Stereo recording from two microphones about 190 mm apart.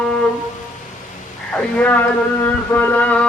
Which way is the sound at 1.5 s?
10° left (ahead or behind).